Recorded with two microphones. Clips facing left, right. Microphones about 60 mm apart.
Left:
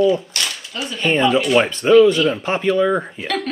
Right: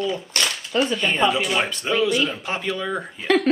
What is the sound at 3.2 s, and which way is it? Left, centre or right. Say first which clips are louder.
Speech: right 4 dB; right.